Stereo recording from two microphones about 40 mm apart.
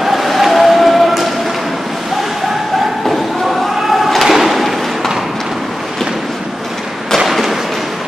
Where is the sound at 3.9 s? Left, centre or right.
Centre.